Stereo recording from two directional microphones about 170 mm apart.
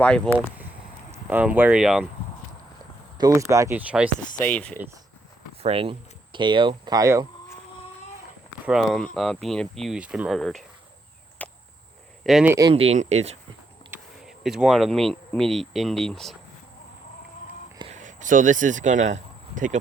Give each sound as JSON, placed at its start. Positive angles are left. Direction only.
{"t": 0.0, "sound": "speech", "side_deg": 5}
{"t": 1.1, "sound": "speech", "side_deg": -10}
{"t": 3.2, "sound": "speech", "side_deg": -20}
{"t": 4.4, "sound": "speech", "side_deg": 10}
{"t": 5.6, "sound": "speech", "side_deg": -35}
{"t": 8.6, "sound": "speech", "side_deg": 0}
{"t": 11.4, "sound": "a sound", "side_deg": 10}
{"t": 12.2, "sound": "speech", "side_deg": 0}
{"t": 12.5, "sound": "speech", "side_deg": -20}
{"t": 12.7, "sound": "speech", "side_deg": -35}
{"t": 14.3, "sound": "speech", "side_deg": 0}
{"t": 17.9, "sound": "speech", "side_deg": -45}